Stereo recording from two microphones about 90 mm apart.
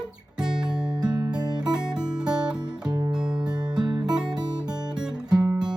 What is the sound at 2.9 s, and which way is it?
Music, 45° right (ahead or behind).